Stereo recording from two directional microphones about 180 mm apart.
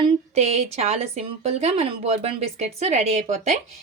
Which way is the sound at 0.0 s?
35° right (ahead or behind).